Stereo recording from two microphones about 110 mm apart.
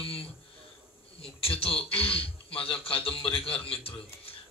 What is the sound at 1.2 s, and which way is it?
Speech, 60° left (ahead or behind).